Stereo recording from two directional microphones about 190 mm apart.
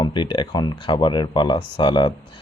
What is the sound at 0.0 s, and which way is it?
Speech, 25° left (ahead or behind).